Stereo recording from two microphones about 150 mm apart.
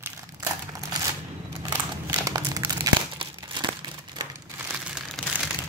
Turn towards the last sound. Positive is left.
turn(degrees=0)  # may be behind; listen again after turning